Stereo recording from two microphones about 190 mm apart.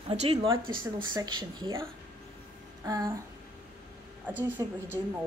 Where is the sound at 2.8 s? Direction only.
20° right (ahead or behind).